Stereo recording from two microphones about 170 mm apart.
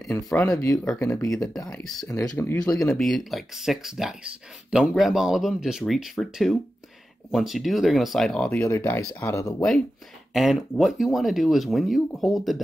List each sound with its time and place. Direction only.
0.4 s speech: 15° left (ahead or behind)
0.8 s speech: 5° left (ahead or behind)
2.0 s speech: 15° left (ahead or behind)
2.7 s speech: centre (ahead or behind)
8.6 s speech: 15° left (ahead or behind)
9.6 s speech: centre (ahead or behind)